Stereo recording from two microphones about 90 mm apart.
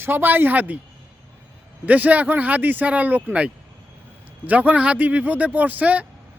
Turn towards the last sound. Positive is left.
turn(degrees=-15)  # may be behind; listen again after turning